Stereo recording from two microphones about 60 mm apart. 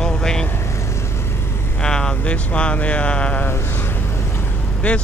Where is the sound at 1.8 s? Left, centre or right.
Centre.